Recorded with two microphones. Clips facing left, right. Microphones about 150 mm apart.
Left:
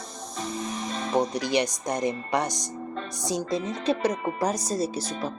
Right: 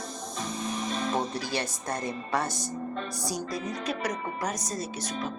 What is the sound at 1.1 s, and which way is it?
Speech, 15° left (ahead or behind).